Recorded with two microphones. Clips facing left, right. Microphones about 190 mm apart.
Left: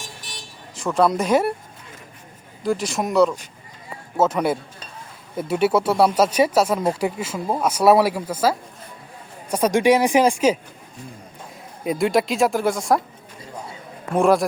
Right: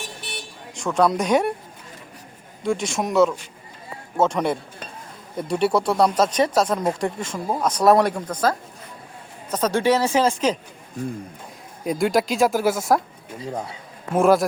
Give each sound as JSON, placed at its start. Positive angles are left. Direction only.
{"t": 0.2, "sound": "vehicle", "side_deg": -65}
{"t": 0.8, "sound": "speech", "side_deg": 0}
{"t": 2.6, "sound": "speech", "side_deg": 0}
{"t": 11.9, "sound": "speech", "side_deg": 0}
{"t": 14.1, "sound": "speech", "side_deg": 0}